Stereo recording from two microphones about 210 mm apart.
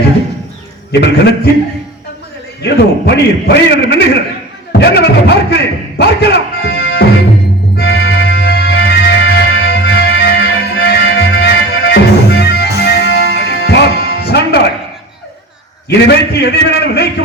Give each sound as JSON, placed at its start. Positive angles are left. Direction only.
{"t": 0.9, "sound": "speech", "side_deg": 55}
{"t": 2.6, "sound": "a man's voice", "side_deg": 55}
{"t": 7.8, "sound": "music", "side_deg": 50}
{"t": 15.9, "sound": "a man's voice", "side_deg": 55}